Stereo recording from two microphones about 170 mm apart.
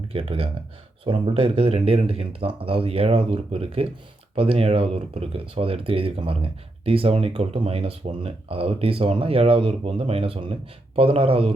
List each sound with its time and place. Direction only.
0.1 s speech: 35° right (ahead or behind)